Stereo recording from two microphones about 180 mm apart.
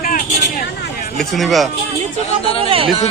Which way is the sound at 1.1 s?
Centre (ahead or behind).